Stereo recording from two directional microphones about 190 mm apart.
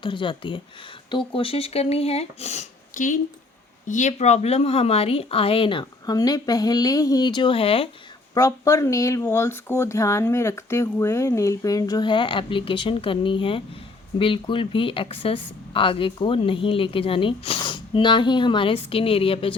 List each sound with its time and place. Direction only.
0.0 s a woman's voice: 25° left (ahead or behind)
8.3 s a woman's voice: 15° left (ahead or behind)